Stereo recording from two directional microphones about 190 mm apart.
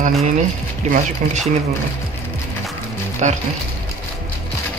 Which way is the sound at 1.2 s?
45° right (ahead or behind).